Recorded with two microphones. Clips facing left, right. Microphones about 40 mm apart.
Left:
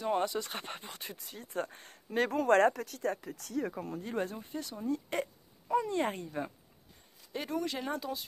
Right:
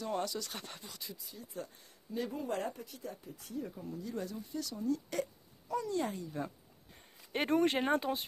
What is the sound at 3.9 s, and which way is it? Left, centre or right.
Speech, left.